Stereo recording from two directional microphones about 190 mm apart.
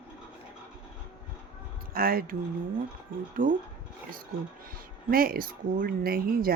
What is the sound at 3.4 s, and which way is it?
Speech, 45° right (ahead or behind).